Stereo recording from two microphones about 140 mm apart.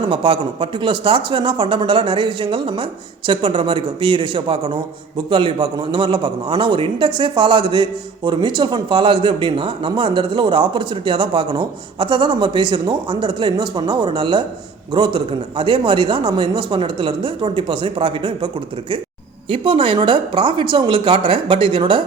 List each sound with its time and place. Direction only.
0.1 s a man's voice: 40° right (ahead or behind)